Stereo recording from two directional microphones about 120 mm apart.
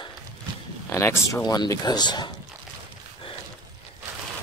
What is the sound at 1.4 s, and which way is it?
Speech, 30° left (ahead or behind).